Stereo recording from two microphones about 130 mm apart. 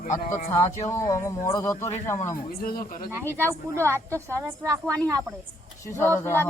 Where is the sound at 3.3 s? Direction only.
20° right (ahead or behind).